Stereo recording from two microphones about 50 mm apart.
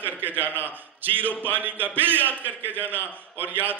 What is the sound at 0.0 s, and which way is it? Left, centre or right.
A man's voice, right.